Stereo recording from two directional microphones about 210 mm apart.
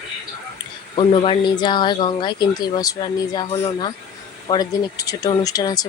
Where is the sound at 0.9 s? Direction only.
25° left (ahead or behind).